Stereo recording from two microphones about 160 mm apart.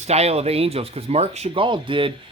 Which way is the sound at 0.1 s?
40° right (ahead or behind).